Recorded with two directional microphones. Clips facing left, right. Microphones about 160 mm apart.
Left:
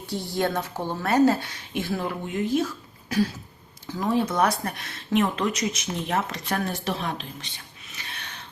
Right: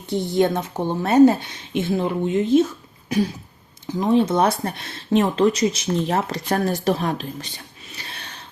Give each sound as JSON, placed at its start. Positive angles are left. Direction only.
{"t": 0.1, "sound": "a woman's voice", "side_deg": -20}
{"t": 3.1, "sound": "a sound", "side_deg": -20}
{"t": 3.8, "sound": "speech", "side_deg": -20}
{"t": 7.9, "sound": "gasp", "side_deg": -35}